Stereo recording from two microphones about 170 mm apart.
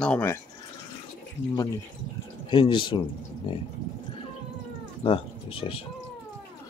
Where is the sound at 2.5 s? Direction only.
30° left (ahead or behind).